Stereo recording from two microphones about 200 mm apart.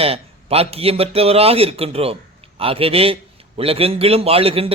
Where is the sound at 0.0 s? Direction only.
30° right (ahead or behind).